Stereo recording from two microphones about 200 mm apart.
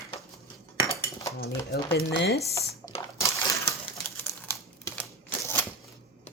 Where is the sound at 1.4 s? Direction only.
50° left (ahead or behind).